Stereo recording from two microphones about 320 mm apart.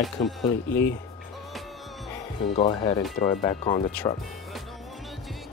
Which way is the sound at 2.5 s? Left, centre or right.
Centre.